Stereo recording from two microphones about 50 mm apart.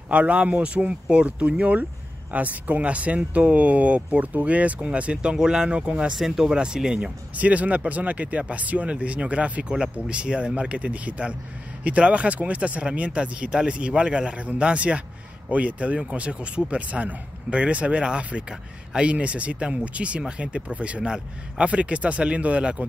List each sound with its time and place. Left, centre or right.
0.1 s speech: right
6.1 s speech: centre
7.3 s speech: right